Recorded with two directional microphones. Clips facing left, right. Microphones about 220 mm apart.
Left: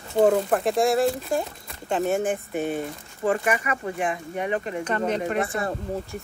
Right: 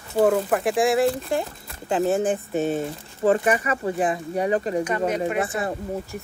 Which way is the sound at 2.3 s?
40° right (ahead or behind).